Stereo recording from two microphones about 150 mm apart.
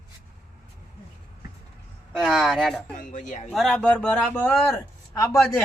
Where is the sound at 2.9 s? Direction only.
55° left (ahead or behind).